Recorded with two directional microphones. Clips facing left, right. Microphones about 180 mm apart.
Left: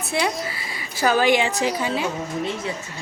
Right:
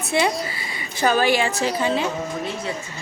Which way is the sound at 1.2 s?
15° left (ahead or behind).